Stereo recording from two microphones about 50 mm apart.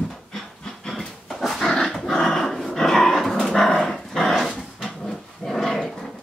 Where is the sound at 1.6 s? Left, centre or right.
Centre.